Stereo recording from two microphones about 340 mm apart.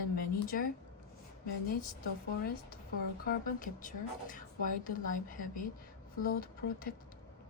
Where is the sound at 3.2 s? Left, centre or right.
Left.